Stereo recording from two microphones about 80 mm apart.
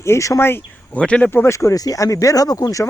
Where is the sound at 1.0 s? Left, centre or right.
Centre.